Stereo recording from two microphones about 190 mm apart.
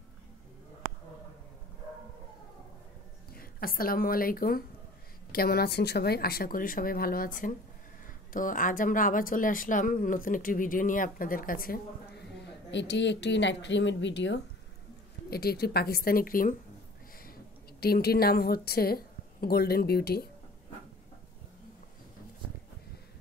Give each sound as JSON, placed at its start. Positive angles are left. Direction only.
{"t": 3.3, "sound": "a woman's voice", "side_deg": 50}
{"t": 12.2, "sound": "speech", "side_deg": 65}
{"t": 15.2, "sound": "a woman's voice", "side_deg": 55}